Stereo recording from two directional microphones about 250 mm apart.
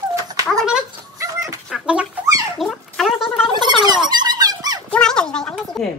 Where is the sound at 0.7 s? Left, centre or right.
Centre.